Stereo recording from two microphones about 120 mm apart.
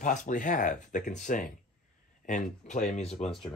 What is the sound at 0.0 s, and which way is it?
Speech, 90° left.